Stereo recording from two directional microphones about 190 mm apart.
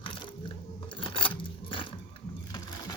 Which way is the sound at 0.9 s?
25° left (ahead or behind).